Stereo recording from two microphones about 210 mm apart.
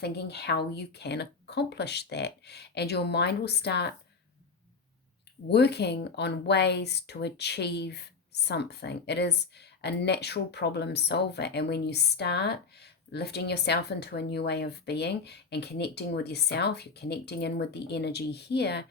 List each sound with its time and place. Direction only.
0.0 s speech: 50° left (ahead or behind)
5.5 s speech: 50° left (ahead or behind)